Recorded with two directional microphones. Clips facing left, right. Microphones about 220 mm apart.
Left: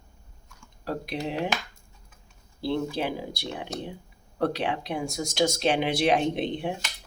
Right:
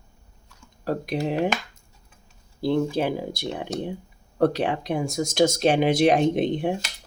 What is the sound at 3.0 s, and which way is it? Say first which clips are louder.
Speech: right 5 dB; 45° right (ahead or behind).